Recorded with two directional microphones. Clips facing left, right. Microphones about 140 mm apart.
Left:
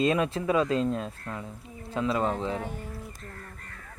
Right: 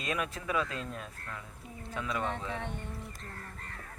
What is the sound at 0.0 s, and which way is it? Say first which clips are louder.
Speech: left 10 dB; 30° left (ahead or behind).